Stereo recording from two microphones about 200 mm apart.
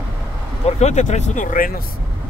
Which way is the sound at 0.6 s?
35° left (ahead or behind).